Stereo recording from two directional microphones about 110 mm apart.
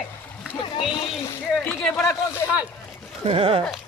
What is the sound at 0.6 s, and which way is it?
Speech, 45° left (ahead or behind).